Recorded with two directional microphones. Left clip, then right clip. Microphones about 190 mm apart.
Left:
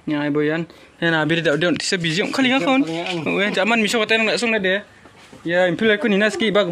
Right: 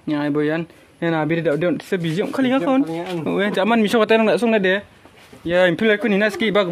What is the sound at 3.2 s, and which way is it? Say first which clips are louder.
Speech: even; 10° right (ahead or behind).